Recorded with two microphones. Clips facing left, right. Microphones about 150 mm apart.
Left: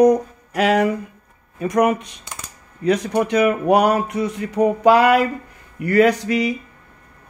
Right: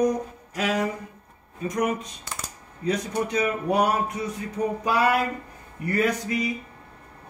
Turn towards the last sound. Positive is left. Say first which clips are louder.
# left 7 dB
turn(degrees=80)